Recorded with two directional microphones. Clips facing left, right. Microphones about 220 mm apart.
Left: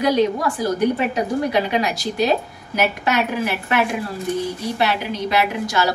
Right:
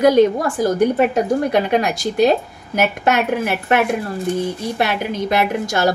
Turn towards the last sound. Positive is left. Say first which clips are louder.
# right 2 dB
turn(degrees=-50)  # may be behind; listen again after turning